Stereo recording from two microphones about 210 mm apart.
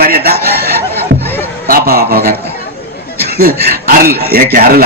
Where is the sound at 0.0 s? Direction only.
45° right (ahead or behind).